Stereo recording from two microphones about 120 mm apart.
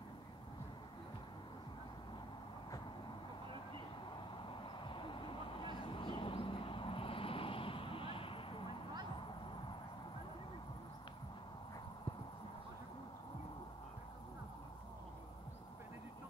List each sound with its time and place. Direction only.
4.5 s vehicle: 45° left (ahead or behind)